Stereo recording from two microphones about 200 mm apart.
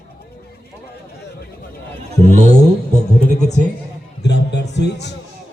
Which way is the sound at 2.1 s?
30° right (ahead or behind).